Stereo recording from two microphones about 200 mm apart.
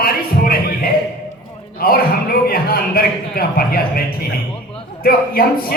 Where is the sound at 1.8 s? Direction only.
50° left (ahead or behind).